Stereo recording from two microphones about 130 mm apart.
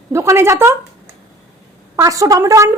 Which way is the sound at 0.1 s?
20° right (ahead or behind).